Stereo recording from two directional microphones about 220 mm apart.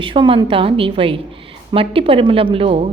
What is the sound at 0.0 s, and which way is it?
A woman's voice, 25° right (ahead or behind).